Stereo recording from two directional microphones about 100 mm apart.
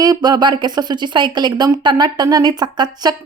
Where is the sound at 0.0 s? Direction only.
40° right (ahead or behind).